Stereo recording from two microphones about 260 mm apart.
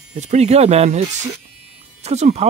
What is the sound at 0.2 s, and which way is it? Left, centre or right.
Speech, right.